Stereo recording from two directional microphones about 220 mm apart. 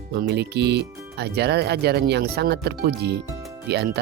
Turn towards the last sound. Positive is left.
turn(degrees=-50)  # may be behind; listen again after turning